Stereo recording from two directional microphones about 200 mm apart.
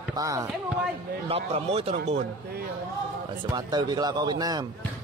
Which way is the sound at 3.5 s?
20° right (ahead or behind).